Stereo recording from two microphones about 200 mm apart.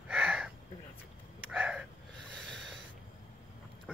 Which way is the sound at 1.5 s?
5° right (ahead or behind).